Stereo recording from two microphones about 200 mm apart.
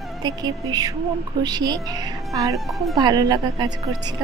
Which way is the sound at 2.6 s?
Centre (ahead or behind).